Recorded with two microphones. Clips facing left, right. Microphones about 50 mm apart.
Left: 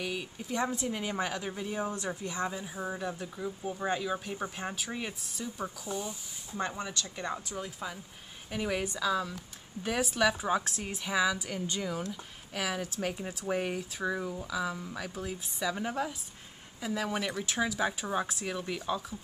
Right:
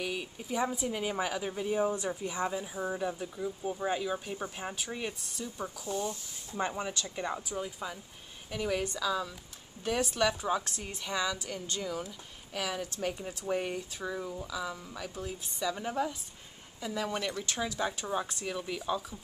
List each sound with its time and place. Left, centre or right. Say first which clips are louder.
0.0 s speech: even; centre
6.5 s speech: right 1 dB; centre
8.5 s a woman's voice: even; centre